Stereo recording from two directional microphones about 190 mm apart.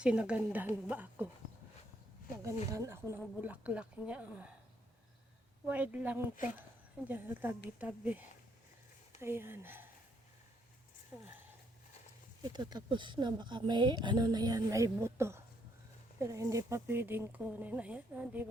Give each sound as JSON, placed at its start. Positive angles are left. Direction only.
{"t": 0.0, "sound": "speech", "side_deg": -5}
{"t": 2.4, "sound": "speech", "side_deg": -15}
{"t": 5.6, "sound": "speech", "side_deg": -10}
{"t": 9.2, "sound": "speech", "side_deg": -10}
{"t": 11.1, "sound": "speech", "side_deg": -5}
{"t": 12.4, "sound": "speech", "side_deg": -20}